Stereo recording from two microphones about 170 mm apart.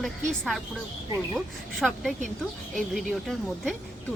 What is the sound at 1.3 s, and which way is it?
Speech, centre (ahead or behind).